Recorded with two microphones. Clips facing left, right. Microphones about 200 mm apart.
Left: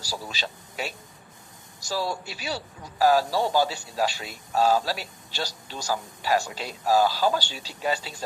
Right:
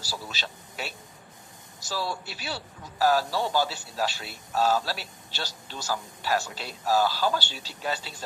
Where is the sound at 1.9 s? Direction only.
40° left (ahead or behind).